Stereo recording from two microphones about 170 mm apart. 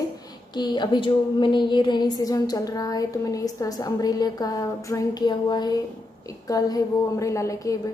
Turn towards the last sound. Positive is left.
turn(degrees=20)  # may be behind; listen again after turning